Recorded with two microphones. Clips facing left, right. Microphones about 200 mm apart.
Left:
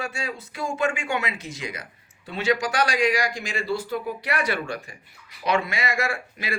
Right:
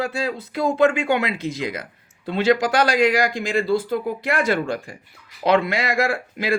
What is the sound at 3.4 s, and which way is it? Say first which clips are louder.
Speech: right 7 dB; 55° right (ahead or behind).